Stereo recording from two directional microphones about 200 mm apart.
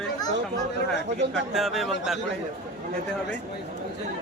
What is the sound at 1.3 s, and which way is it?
Speech, centre (ahead or behind).